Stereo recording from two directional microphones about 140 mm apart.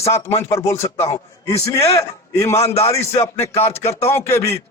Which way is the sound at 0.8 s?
50° left (ahead or behind).